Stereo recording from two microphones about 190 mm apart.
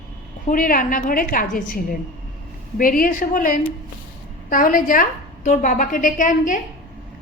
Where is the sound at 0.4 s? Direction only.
45° left (ahead or behind).